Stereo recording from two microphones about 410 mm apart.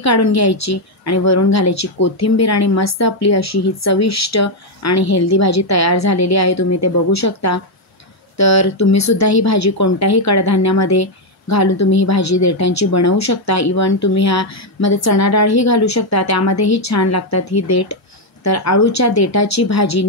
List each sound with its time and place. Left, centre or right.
0.0 s a woman's voice: left